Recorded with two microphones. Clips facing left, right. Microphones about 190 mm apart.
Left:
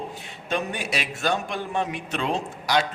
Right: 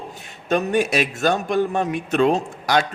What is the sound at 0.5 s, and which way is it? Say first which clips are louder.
A man's voice: right 8 dB; 45° right (ahead or behind).